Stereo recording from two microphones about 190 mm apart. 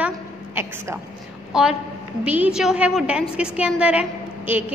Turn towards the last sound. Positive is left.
turn(degrees=-10)  # may be behind; listen again after turning